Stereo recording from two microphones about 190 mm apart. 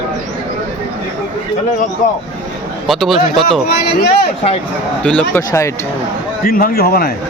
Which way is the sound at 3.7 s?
55° left (ahead or behind).